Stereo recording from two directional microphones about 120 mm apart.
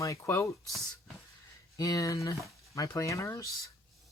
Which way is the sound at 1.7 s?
30° left (ahead or behind).